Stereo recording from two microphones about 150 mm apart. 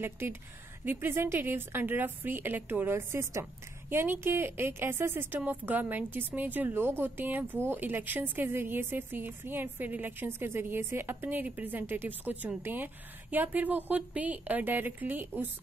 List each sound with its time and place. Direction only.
0.0 s speech: 15° right (ahead or behind)